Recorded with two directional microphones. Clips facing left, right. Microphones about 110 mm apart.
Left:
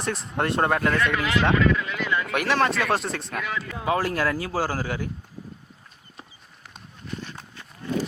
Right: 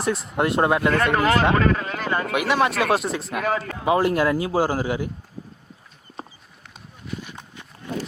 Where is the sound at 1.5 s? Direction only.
45° right (ahead or behind).